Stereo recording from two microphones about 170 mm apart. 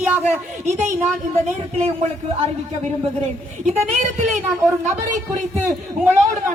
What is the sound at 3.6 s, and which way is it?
Speech, 40° right (ahead or behind).